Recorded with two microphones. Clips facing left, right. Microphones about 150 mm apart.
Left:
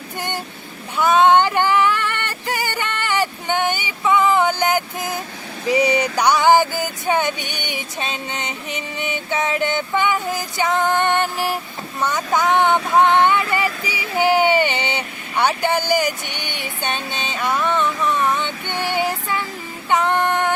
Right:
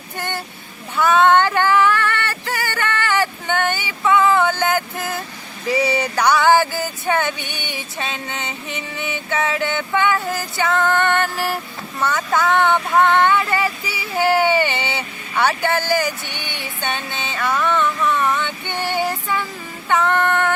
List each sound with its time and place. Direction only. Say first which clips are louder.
0.2 s speech: even; 15° left (ahead or behind)
0.9 s female singing: even; 15° left (ahead or behind)
5.6 s a sound: left 2 dB; 15° left (ahead or behind)
19.9 s female singing: even; 15° left (ahead or behind)